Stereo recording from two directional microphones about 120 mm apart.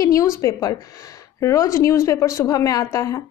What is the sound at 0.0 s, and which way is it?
A woman's voice, 25° left (ahead or behind).